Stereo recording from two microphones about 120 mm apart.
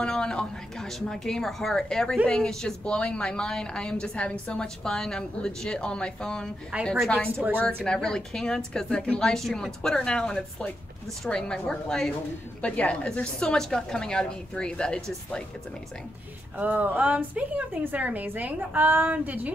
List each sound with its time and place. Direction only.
0.0 s a woman's voice: 5° left (ahead or behind)
6.7 s a woman's voice: 10° right (ahead or behind)
7.1 s a woman's voice: 5° left (ahead or behind)
16.5 s a woman's voice: 15° right (ahead or behind)